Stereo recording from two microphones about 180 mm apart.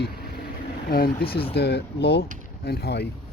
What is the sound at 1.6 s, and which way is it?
Speech, 65° left (ahead or behind).